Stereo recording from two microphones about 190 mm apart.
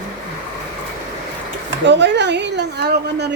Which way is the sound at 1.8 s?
65° right (ahead or behind).